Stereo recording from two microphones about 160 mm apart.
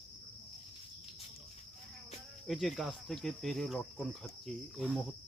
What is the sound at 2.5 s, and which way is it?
Speech, centre (ahead or behind).